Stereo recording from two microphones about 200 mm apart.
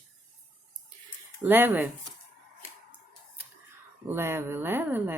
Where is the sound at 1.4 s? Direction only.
10° right (ahead or behind).